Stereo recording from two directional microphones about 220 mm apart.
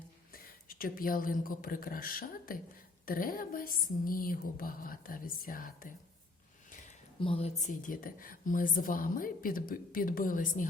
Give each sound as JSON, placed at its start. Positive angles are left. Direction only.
{"t": 0.3, "sound": "a woman's voice", "side_deg": 40}
{"t": 6.7, "sound": "a sound", "side_deg": 35}
{"t": 7.2, "sound": "a woman's voice", "side_deg": 25}